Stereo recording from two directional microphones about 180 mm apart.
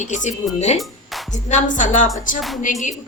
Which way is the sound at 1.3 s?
45° left (ahead or behind).